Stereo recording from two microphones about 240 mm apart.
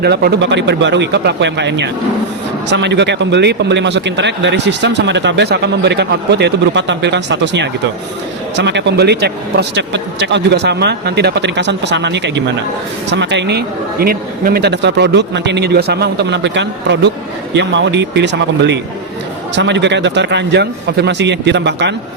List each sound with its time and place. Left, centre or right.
0.0 s speech: right